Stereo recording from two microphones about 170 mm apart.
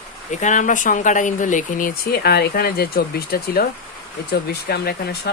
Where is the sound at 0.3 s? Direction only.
45° left (ahead or behind); by 3.7 s 60° left (ahead or behind).